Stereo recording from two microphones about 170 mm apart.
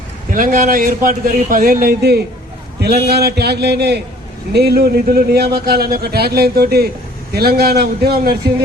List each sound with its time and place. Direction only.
0.3 s a man's voice: 55° right (ahead or behind)